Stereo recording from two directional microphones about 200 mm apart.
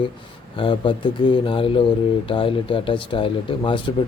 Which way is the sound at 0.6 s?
25° left (ahead or behind).